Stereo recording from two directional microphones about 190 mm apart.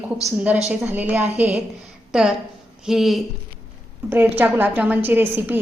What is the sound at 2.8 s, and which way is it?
A woman's voice, centre (ahead or behind).